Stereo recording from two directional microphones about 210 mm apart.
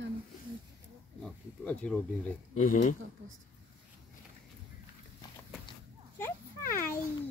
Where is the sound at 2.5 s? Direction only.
35° left (ahead or behind).